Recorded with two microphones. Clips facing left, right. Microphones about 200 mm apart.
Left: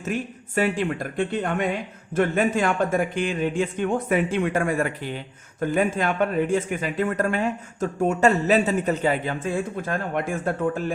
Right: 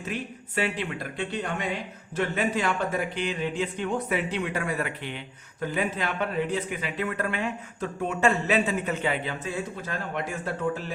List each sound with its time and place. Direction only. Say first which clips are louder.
0.0 s speech: left 5 dB; 45° left (ahead or behind)